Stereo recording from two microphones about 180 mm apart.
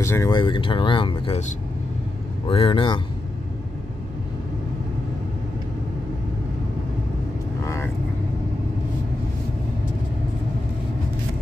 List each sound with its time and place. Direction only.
0.0 s speech: 15° left (ahead or behind)
2.4 s speech: 30° left (ahead or behind)
7.6 s vehicle: 15° left (ahead or behind)